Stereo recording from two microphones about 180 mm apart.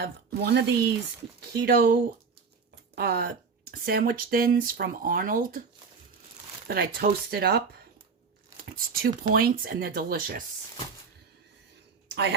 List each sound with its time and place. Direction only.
0.0 s speech: 65° right (ahead or behind); by 5.6 s 50° right (ahead or behind)
6.7 s speech: 55° right (ahead or behind)
12.0 s a sound: 75° right (ahead or behind)